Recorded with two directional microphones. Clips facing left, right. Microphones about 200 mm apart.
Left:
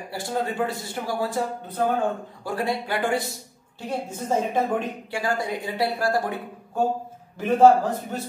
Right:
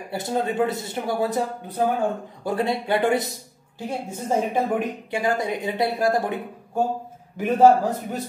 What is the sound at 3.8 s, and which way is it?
Speech, 10° right (ahead or behind).